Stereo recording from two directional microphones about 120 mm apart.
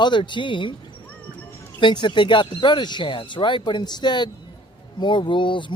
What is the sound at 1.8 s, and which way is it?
Speech, 40° left (ahead or behind).